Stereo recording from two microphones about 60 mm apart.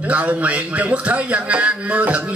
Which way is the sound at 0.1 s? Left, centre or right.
Right.